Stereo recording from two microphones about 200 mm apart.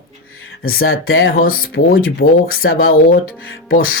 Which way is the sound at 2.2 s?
70° left (ahead or behind).